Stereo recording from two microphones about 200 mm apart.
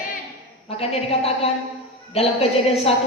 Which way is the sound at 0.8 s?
30° left (ahead or behind).